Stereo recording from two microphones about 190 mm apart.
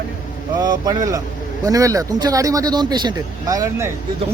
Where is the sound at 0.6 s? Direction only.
20° right (ahead or behind).